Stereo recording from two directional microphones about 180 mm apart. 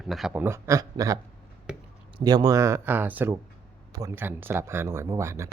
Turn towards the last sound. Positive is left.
turn(degrees=-15)  # may be behind; listen again after turning